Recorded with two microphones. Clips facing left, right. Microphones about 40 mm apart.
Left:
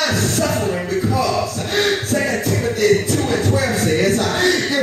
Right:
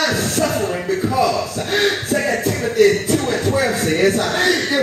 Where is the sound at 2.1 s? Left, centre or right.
Centre.